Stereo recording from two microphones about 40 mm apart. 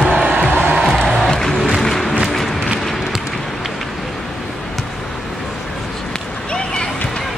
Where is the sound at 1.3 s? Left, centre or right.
Centre.